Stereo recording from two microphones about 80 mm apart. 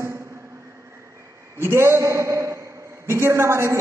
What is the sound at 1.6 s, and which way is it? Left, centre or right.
A man's voice, right.